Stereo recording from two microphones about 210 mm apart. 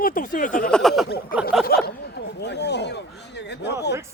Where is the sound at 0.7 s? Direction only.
Centre (ahead or behind).